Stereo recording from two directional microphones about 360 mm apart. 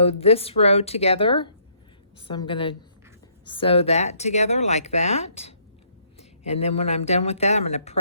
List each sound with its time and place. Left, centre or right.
0.0 s speech: centre